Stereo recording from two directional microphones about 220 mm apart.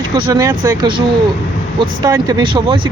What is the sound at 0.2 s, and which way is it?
Speech, 15° right (ahead or behind).